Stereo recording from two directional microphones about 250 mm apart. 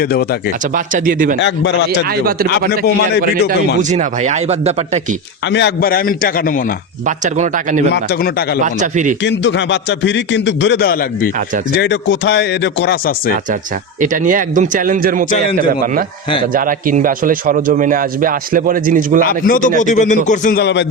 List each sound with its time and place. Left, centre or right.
0.0 s a man's voice: left
0.9 s speech: right
1.4 s a man's voice: left
2.0 s speech: right
3.8 s speech: right
5.5 s a man's voice: left
7.3 s speech: right
9.2 s a man's voice: left
14.0 s speech: right
16.6 s speech: right
19.3 s a man's voice: left